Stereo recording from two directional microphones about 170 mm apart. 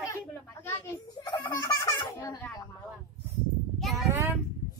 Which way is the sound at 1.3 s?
25° left (ahead or behind).